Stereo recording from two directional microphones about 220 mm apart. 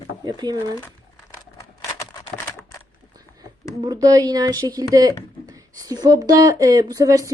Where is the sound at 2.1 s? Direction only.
15° left (ahead or behind).